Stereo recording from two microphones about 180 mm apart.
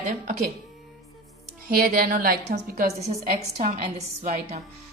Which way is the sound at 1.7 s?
55° right (ahead or behind).